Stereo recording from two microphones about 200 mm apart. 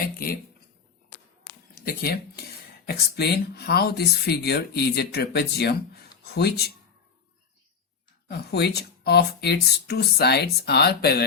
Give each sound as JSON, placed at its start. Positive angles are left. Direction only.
{"t": 1.8, "sound": "speech", "side_deg": 50}
{"t": 8.3, "sound": "speech", "side_deg": 55}